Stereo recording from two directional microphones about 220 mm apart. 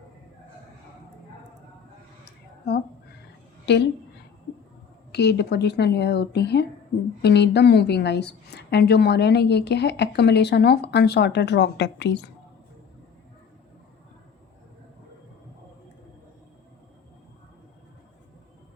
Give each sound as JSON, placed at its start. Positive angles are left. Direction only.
{"t": 3.7, "sound": "a woman's voice", "side_deg": 50}
{"t": 5.1, "sound": "a woman's voice", "side_deg": 50}